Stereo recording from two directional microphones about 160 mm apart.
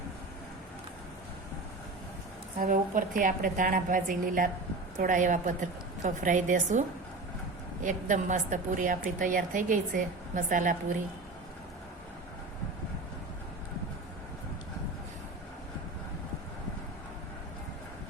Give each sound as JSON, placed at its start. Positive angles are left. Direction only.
{"t": 2.6, "sound": "a woman's voice", "side_deg": -55}